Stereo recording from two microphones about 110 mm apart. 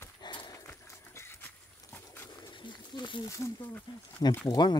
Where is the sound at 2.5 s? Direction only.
45° left (ahead or behind).